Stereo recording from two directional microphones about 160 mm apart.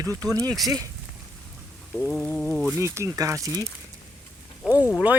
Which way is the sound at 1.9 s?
10° left (ahead or behind).